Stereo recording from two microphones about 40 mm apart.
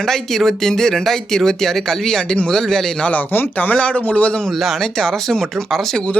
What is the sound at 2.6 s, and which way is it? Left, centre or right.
Speech, centre.